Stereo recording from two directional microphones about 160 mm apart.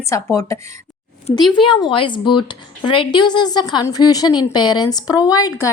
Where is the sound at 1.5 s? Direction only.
30° left (ahead or behind).